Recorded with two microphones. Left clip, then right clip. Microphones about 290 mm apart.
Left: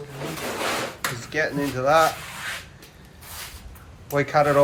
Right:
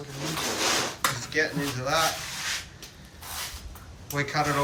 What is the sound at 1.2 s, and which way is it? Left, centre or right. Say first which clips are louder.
Speech: left 2 dB; centre.